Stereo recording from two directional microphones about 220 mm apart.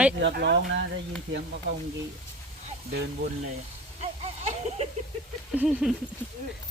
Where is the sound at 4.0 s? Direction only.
30° right (ahead or behind).